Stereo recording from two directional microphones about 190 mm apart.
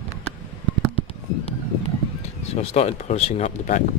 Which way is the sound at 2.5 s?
30° left (ahead or behind).